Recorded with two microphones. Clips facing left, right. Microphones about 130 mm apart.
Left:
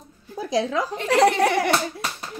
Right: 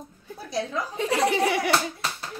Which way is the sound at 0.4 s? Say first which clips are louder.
Left 6 dB; 90° left.